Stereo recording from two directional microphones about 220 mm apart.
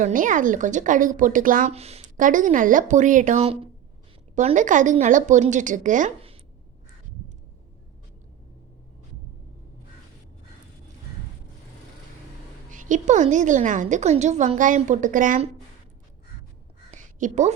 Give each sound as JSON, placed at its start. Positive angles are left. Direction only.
{"t": 0.0, "sound": "a woman's voice", "side_deg": -35}
{"t": 12.7, "sound": "a woman's voice", "side_deg": -35}
{"t": 16.9, "sound": "a sound", "side_deg": -35}